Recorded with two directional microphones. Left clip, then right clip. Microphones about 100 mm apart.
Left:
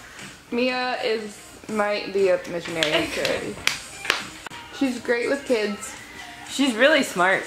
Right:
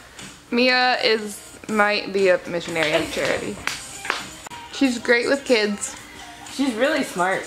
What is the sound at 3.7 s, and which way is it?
Music, 45° left (ahead or behind).